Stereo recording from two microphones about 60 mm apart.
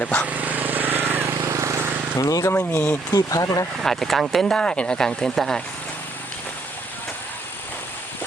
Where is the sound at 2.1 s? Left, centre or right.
Left.